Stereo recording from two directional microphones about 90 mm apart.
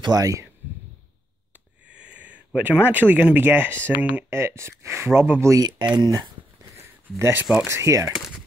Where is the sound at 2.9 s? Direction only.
20° right (ahead or behind).